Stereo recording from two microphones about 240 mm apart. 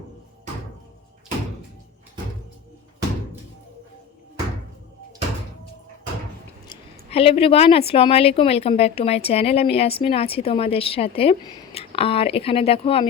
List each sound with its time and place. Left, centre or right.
6.7 s a woman's voice: left